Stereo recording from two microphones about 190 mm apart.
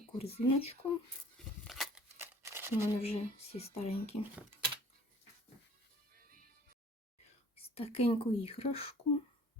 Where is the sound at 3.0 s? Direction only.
30° left (ahead or behind).